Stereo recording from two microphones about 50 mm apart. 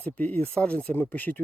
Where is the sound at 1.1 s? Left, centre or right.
Left.